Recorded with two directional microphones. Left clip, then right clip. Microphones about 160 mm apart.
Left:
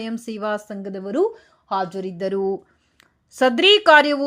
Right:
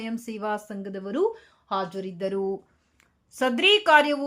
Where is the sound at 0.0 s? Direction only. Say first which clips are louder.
Left 5 dB; 25° left (ahead or behind).